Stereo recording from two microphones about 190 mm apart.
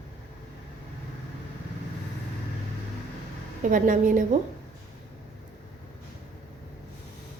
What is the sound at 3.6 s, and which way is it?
Speech, 45° right (ahead or behind).